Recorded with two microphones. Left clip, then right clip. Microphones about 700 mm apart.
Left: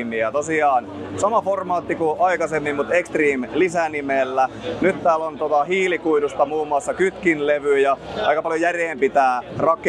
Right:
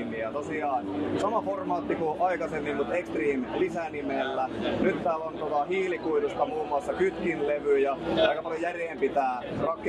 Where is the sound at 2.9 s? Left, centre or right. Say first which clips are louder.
Left 15 dB; centre.